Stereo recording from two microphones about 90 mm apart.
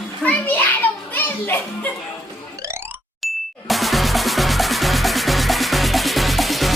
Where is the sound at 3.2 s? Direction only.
Centre (ahead or behind).